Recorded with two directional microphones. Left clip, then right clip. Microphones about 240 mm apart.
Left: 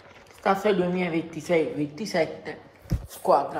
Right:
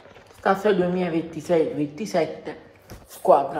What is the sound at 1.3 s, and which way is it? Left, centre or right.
Speech, right.